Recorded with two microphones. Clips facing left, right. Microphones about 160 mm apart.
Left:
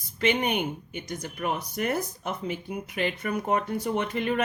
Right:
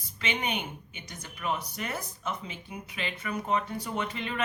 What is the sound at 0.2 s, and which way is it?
Speech, 50° left (ahead or behind).